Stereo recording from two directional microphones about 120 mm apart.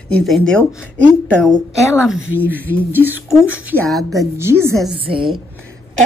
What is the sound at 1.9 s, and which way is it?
Speech, 10° right (ahead or behind).